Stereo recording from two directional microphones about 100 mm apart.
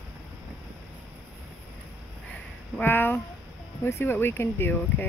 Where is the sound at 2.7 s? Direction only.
20° left (ahead or behind).